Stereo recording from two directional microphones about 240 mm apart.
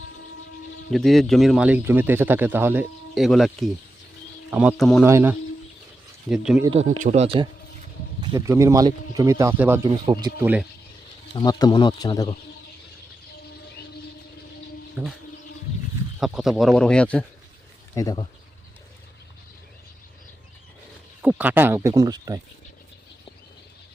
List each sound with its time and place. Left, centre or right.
0.9 s a man's voice: centre
5.0 s a man's voice: centre
6.7 s speech: right
8.2 s speech: centre
11.3 s speech: centre
15.0 s speech: centre
16.2 s a man's voice: centre
17.9 s speech: centre
21.2 s speech: centre